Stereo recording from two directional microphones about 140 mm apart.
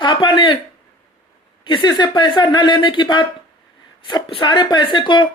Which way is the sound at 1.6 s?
35° left (ahead or behind).